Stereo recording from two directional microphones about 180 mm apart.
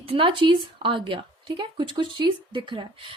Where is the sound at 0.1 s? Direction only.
30° right (ahead or behind).